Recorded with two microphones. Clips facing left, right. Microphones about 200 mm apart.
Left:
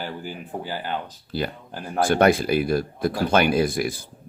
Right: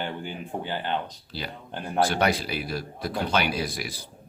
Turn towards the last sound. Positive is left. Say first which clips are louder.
# left 9 dB
turn(degrees=50)  # may be behind; listen again after turning